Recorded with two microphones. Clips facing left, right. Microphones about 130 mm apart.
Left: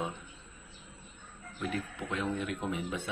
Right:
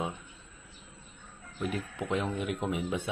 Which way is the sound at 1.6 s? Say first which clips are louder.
Right 2 dB; 20° right (ahead or behind).